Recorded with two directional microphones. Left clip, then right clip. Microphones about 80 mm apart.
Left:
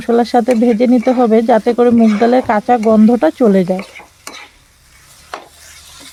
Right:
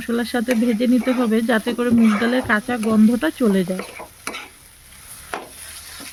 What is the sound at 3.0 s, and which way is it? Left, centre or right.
Speech, centre.